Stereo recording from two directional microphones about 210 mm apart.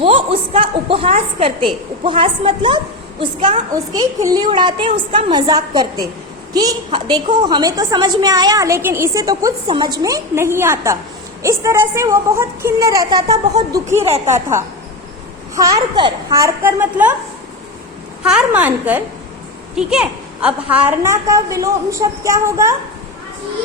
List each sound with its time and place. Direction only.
0.0 s a woman's voice: 25° right (ahead or behind)
14.0 s a woman's voice: 30° right (ahead or behind)
15.5 s a woman's voice: 15° right (ahead or behind)
18.2 s a woman's voice: 5° right (ahead or behind)